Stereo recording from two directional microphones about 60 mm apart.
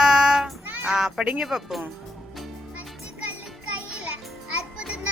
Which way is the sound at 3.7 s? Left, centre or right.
Right.